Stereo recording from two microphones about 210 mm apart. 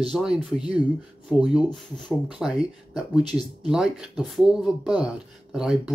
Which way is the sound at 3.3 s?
30° right (ahead or behind).